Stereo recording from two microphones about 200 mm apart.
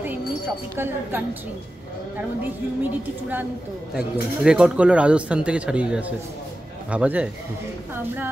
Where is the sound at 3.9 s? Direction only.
5° right (ahead or behind).